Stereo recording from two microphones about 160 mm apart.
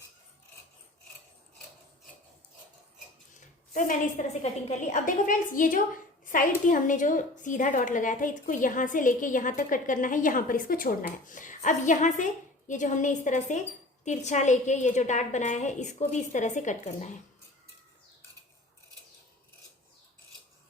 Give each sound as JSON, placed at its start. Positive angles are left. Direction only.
{"t": 3.8, "sound": "a woman's voice", "side_deg": 55}